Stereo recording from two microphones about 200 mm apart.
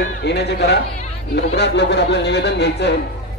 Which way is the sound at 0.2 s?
55° left (ahead or behind).